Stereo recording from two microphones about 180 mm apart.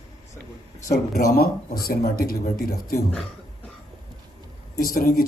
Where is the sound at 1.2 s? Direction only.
55° left (ahead or behind).